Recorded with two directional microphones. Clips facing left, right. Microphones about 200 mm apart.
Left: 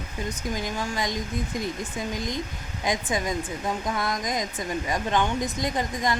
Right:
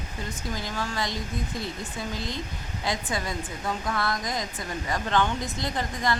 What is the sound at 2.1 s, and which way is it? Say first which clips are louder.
Speech: left 3 dB; 15° left (ahead or behind).